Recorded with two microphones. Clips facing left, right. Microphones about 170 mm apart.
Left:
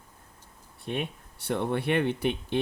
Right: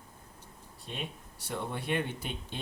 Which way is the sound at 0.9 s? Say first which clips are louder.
Left 8 dB; 60° left (ahead or behind).